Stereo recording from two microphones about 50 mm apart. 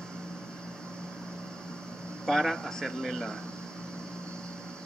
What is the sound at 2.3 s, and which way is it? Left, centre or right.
Speech, centre.